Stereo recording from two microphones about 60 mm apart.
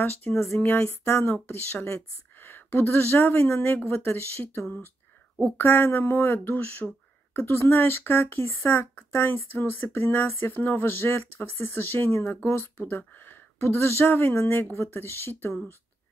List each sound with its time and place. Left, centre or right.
0.3 s speech: centre
0.7 s a sound: left
1.5 s speech: left
7.3 s speech: left